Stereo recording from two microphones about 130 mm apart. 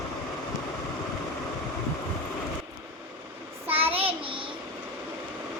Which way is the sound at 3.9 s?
45° right (ahead or behind).